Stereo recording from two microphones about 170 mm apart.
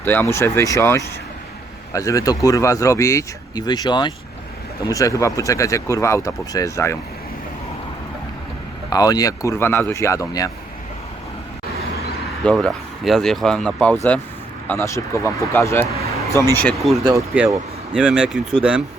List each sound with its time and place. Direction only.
0.0 s speech: 10° left (ahead or behind)
8.9 s speech: 20° left (ahead or behind)
12.4 s speech: 5° left (ahead or behind)
14.7 s speech: 15° left (ahead or behind)
17.0 s speech: 20° right (ahead or behind)
17.9 s speech: 5° right (ahead or behind)